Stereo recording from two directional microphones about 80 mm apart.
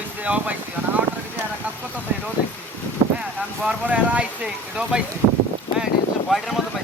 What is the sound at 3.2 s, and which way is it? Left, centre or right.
Speech, centre.